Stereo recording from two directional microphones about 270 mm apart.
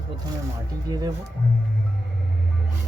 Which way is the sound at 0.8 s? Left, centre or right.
Centre.